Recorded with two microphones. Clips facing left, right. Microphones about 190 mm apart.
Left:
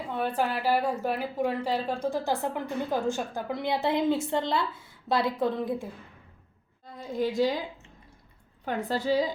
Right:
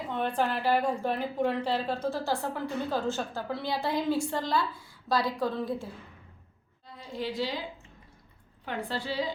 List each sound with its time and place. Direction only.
0.1 s a woman's voice: 5° left (ahead or behind)
6.8 s a woman's voice: 45° left (ahead or behind)
8.6 s a woman's voice: 45° left (ahead or behind)